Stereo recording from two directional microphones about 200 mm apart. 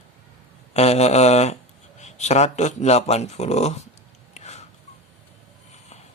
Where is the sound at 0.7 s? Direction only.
35° left (ahead or behind).